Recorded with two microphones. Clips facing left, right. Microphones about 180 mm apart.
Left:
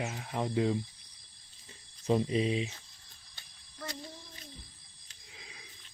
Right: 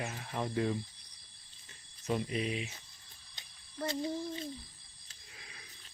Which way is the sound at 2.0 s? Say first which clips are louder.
Left 6 dB; 30° left (ahead or behind).